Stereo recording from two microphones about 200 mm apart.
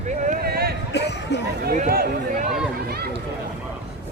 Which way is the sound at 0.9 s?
60° left (ahead or behind).